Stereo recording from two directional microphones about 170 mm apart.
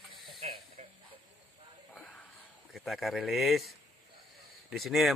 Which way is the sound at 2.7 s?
Centre (ahead or behind).